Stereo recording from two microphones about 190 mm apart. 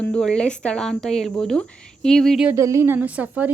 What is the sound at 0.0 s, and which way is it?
Speech, 5° left (ahead or behind).